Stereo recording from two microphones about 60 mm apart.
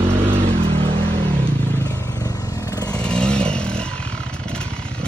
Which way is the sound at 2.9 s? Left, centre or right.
Centre.